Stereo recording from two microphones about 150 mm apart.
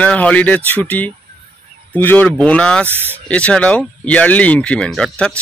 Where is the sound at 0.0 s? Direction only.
10° left (ahead or behind).